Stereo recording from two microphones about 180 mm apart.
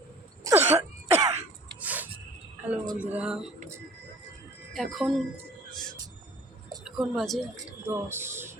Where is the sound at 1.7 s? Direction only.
10° right (ahead or behind).